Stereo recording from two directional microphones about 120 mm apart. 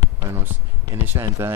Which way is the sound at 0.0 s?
20° right (ahead or behind).